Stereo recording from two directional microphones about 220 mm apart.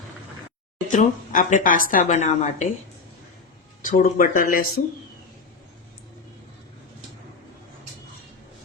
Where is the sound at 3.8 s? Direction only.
40° left (ahead or behind).